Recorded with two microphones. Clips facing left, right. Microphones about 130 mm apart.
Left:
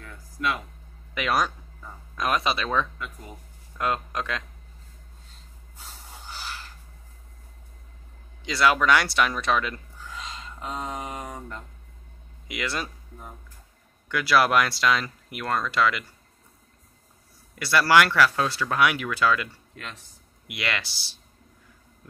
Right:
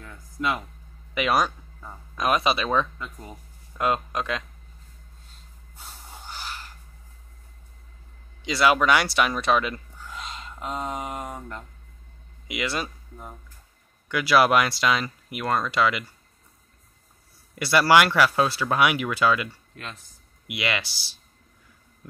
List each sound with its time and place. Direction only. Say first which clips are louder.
0.0 s music: right 1 dB; 20° right (ahead or behind)
1.1 s speech: right 2 dB; 10° right (ahead or behind)
8.5 s speech: right 1 dB; 5° right (ahead or behind)
12.4 s speech: right 2 dB; 10° right (ahead or behind)
17.6 s speech: right 1 dB; 20° right (ahead or behind)